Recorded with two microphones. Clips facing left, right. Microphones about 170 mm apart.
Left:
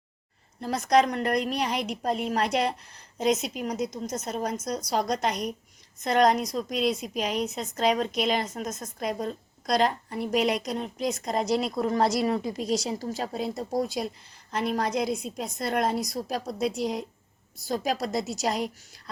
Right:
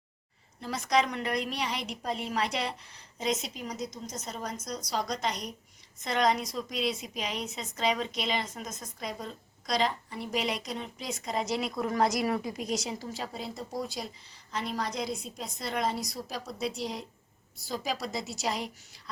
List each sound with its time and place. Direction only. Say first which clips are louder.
0.6 s a woman's voice: left 6 dB; 45° left (ahead or behind)